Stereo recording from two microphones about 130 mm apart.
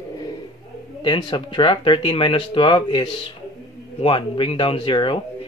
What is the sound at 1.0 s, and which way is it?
Speech, 40° left (ahead or behind).